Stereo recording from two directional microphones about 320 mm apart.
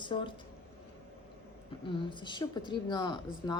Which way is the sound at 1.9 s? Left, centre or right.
Centre.